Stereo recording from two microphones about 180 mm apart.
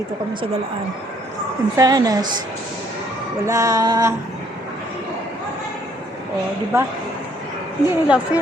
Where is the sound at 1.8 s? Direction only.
20° right (ahead or behind).